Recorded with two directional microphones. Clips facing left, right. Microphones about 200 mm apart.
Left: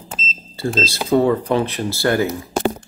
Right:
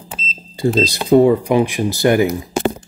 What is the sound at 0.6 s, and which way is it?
Speech, 15° right (ahead or behind).